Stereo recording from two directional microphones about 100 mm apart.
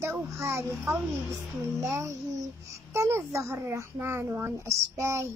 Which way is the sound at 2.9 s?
25° right (ahead or behind).